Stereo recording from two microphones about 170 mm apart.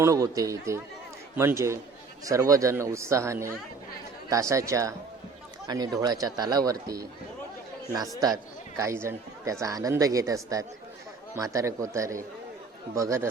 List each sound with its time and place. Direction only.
0.0 s speech: 20° right (ahead or behind)
7.9 s speech: 20° right (ahead or behind)